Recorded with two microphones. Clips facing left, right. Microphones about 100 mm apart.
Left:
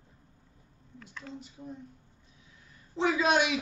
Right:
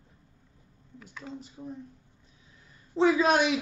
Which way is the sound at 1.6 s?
30° right (ahead or behind).